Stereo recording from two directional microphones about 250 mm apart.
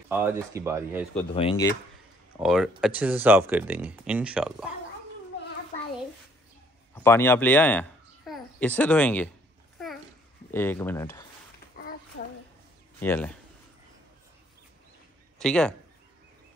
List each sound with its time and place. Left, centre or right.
0.1 s speech: centre
1.3 s speech: left
2.3 s speech: centre
7.0 s a woman's voice: centre
10.5 s speech: centre
11.7 s a sound: left
13.0 s speech: centre
15.3 s a man's voice: centre